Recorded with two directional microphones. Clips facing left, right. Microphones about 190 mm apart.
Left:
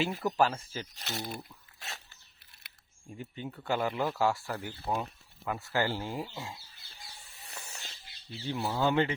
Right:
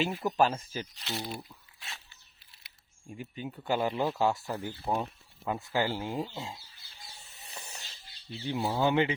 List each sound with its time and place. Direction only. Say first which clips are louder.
0.2 s speech: right 1 dB; 20° right (ahead or behind)
0.9 s speech: left 1 dB; 45° left (ahead or behind)
1.3 s speech: right 1 dB; centre (ahead or behind)
1.8 s a sound: left 3 dB; 40° left (ahead or behind)
3.2 s speech: right 1 dB; 15° right (ahead or behind)
7.2 s snake: right 1 dB; 20° right (ahead or behind)
8.3 s speech: right 2 dB; 20° right (ahead or behind)